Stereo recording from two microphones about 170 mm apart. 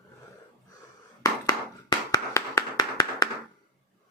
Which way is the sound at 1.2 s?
20° left (ahead or behind).